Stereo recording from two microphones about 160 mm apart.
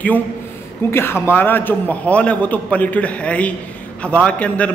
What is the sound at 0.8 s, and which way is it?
A man's voice, 15° left (ahead or behind).